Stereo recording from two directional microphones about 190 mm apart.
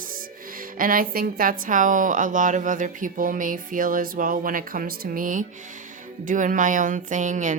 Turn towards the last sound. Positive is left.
turn(degrees=-40)  # may be behind; listen again after turning